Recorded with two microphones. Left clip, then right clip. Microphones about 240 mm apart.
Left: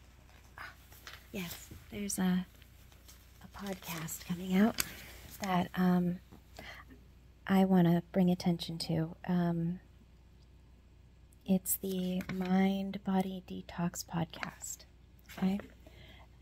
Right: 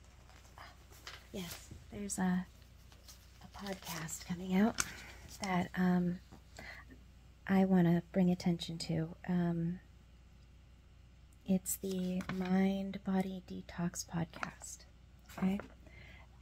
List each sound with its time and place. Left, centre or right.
1.3 s speech: left
1.9 s a woman's voice: centre
3.5 s speech: centre
4.0 s a woman's voice: centre
5.5 s a sound: centre
7.4 s a woman's voice: centre
11.4 s a woman's voice: centre